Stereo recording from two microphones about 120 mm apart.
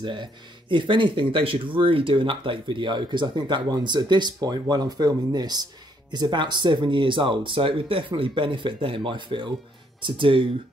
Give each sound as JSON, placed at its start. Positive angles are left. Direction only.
{"t": 0.0, "sound": "speech", "side_deg": -40}